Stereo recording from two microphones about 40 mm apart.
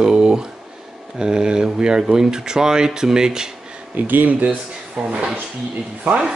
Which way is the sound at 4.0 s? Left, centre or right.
Right.